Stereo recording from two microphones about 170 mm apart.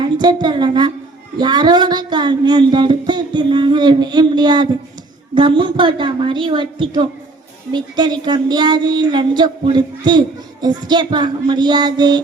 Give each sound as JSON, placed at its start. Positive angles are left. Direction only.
{"t": 0.0, "sound": "a woman's voice", "side_deg": -25}